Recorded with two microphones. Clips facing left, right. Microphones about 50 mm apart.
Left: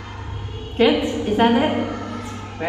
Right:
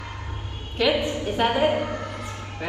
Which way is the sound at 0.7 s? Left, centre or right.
Left.